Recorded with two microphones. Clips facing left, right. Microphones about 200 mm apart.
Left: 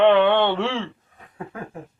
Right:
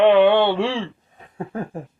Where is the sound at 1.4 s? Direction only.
30° right (ahead or behind).